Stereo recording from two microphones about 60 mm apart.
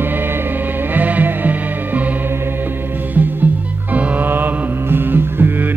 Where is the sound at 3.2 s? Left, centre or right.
Right.